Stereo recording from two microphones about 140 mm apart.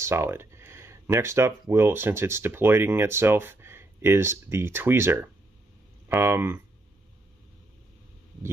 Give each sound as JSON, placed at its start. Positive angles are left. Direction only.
{"t": 0.0, "sound": "speech", "side_deg": -20}